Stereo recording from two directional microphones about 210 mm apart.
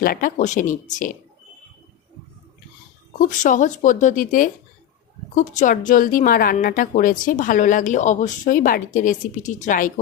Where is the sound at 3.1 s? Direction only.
40° left (ahead or behind).